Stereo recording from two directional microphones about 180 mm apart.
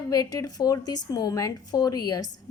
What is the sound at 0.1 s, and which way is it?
Speech, 20° left (ahead or behind).